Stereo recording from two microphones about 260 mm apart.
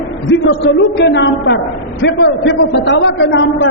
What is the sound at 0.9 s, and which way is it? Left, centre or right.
A man's voice, left.